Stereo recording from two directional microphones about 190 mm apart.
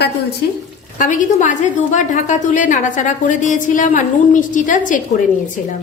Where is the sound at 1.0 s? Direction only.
45° left (ahead or behind).